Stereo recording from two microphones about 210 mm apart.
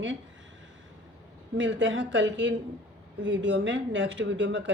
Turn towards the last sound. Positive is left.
turn(degrees=-60)  # may be behind; listen again after turning